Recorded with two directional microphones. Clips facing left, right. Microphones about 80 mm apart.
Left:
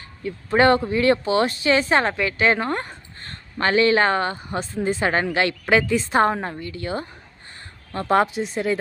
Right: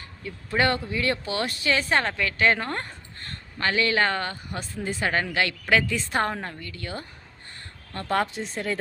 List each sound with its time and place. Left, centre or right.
0.3 s speech: left
3.2 s speech: left; by 8.8 s centre